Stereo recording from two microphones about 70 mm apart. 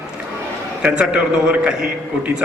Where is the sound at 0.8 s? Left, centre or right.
Centre.